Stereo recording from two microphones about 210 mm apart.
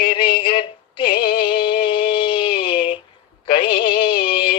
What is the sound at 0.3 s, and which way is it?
Synthetic singing, 25° left (ahead or behind).